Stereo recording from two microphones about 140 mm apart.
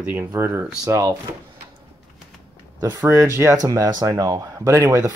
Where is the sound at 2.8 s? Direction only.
25° right (ahead or behind).